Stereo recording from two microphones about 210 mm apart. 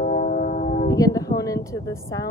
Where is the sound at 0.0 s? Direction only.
40° left (ahead or behind).